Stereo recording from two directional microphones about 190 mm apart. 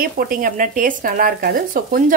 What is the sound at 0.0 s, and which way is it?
Speech, 45° right (ahead or behind).